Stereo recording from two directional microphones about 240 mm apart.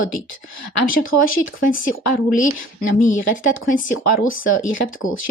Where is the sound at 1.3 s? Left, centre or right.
Left.